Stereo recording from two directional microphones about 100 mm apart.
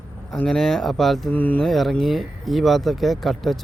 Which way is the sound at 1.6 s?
Centre (ahead or behind).